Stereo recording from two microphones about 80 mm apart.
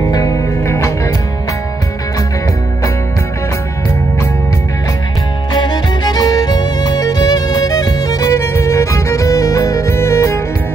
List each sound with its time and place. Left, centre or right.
0.0 s music: left
5.5 s music: left
8.3 s music: left